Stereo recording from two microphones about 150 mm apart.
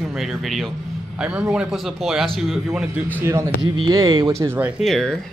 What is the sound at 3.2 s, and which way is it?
Speech, 20° right (ahead or behind).